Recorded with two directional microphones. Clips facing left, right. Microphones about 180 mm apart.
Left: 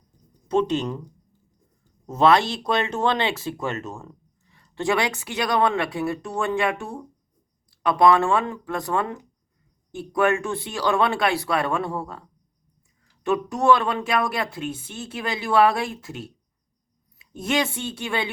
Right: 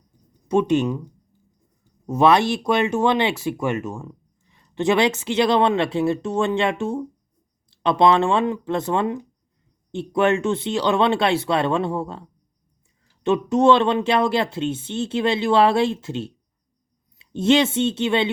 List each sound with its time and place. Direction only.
0.4 s speech: 15° right (ahead or behind)
2.0 s speech: 15° right (ahead or behind)
13.2 s speech: 25° right (ahead or behind)